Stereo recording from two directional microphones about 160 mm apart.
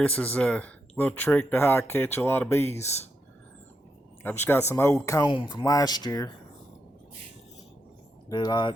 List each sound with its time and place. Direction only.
0.0 s speech: 10° left (ahead or behind)
2.7 s speech: 45° left (ahead or behind)
4.2 s speech: 10° left (ahead or behind)
8.3 s speech: 25° left (ahead or behind)